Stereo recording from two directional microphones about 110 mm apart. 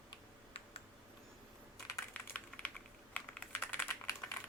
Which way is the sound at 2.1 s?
15° left (ahead or behind).